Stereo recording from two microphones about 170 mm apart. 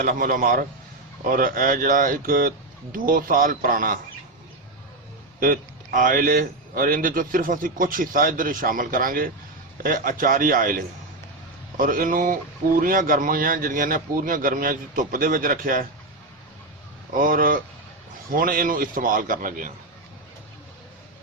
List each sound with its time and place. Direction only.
0.0 s speech: 55° right (ahead or behind)
5.4 s speech: 55° right (ahead or behind)
17.2 s speech: 55° right (ahead or behind)